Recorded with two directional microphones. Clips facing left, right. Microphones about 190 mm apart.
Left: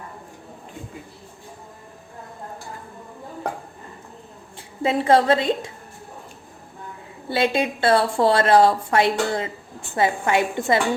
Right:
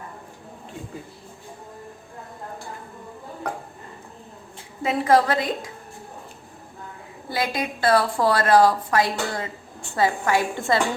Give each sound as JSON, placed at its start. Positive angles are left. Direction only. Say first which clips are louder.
{"t": 4.8, "sound": "a woman's voice", "louder": "left 1 dB", "side_deg": 30}
{"t": 7.3, "sound": "a woman's voice", "louder": "left 5 dB", "side_deg": 25}